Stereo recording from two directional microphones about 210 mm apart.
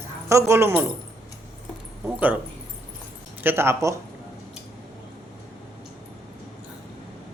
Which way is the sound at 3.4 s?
10° right (ahead or behind).